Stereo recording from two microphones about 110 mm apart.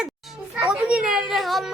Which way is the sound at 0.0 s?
5° right (ahead or behind).